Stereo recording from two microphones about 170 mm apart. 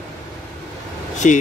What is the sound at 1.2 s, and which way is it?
Speech, 45° left (ahead or behind).